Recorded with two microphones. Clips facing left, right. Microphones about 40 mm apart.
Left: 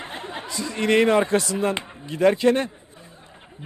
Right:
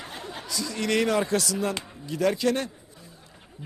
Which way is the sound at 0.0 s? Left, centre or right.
Left.